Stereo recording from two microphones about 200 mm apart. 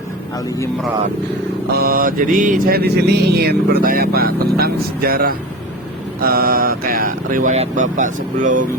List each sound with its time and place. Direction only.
1.7 s mantra: 45° right (ahead or behind)